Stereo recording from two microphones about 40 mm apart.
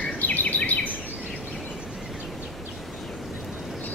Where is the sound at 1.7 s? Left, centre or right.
Centre.